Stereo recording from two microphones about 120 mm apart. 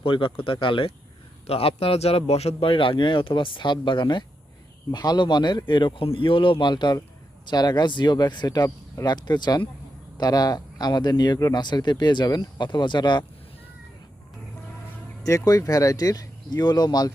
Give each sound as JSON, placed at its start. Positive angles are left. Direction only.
{"t": 0.0, "sound": "a man's voice", "side_deg": 45}
{"t": 15.2, "sound": "speech", "side_deg": 25}